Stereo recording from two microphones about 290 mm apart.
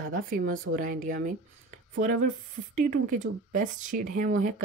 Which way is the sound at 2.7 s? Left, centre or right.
Right.